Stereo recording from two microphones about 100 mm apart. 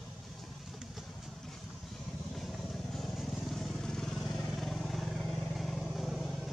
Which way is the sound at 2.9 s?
Centre (ahead or behind).